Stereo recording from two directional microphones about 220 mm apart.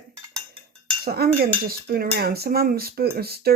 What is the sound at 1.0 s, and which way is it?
Speech, 45° right (ahead or behind).